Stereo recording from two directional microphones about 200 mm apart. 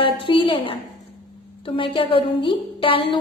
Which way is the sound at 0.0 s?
25° left (ahead or behind).